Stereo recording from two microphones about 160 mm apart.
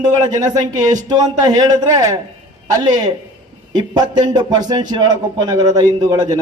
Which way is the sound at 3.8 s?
25° right (ahead or behind).